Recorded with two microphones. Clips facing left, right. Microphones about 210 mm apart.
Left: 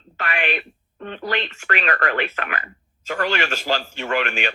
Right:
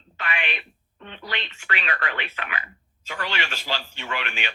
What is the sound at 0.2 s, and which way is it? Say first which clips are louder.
Speech: left 6 dB; 45° left (ahead or behind).